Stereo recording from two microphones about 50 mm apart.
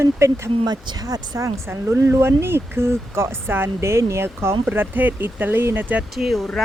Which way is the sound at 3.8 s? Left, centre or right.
Right.